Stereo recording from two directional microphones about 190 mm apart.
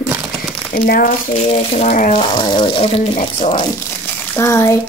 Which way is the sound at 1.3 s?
30° left (ahead or behind).